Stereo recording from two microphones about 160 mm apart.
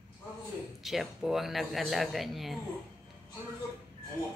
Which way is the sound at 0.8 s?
Centre (ahead or behind).